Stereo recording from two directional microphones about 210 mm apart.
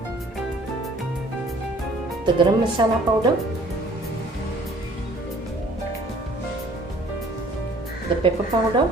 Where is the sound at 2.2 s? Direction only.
20° right (ahead or behind).